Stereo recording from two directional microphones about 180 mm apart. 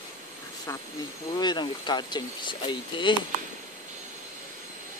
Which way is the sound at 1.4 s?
25° left (ahead or behind).